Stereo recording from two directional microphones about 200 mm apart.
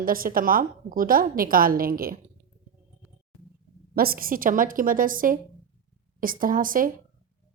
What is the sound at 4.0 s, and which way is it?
Speech, 45° right (ahead or behind).